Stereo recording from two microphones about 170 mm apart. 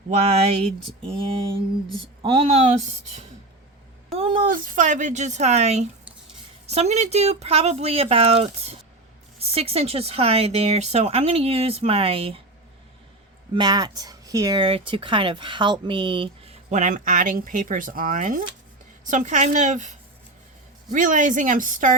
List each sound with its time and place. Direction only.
0.1 s speech: 40° right (ahead or behind)
4.1 s a sound: 30° right (ahead or behind)
4.5 s speech: 55° right (ahead or behind); by 12.4 s 35° right (ahead or behind)
13.5 s speech: 25° right (ahead or behind)
16.6 s speech: 45° right (ahead or behind)